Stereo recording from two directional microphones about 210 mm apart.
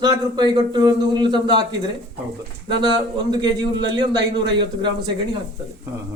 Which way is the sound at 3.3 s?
20° right (ahead or behind).